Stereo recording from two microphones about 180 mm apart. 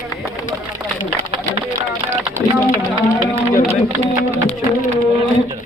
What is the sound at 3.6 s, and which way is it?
Speech, 35° right (ahead or behind).